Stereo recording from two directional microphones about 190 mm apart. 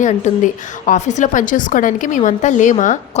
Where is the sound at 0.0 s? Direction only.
40° left (ahead or behind).